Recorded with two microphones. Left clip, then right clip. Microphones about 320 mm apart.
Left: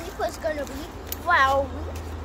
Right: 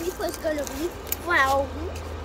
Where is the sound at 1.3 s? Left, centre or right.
Centre.